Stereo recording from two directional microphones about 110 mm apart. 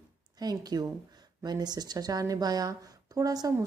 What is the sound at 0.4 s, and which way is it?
A woman's voice, 35° right (ahead or behind).